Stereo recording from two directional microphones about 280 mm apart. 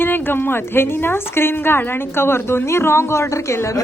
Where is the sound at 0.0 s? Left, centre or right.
Centre.